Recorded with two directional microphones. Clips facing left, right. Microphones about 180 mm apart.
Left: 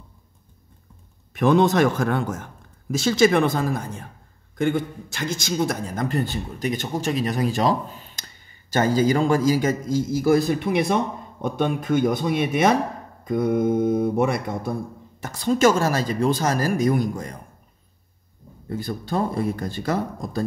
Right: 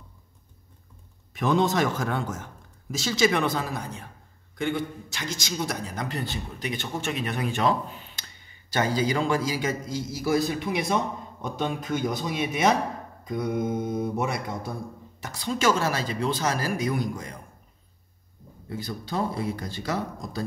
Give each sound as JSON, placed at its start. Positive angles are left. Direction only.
{"t": 1.3, "sound": "a man's voice", "side_deg": 60}
{"t": 18.7, "sound": "a man's voice", "side_deg": 50}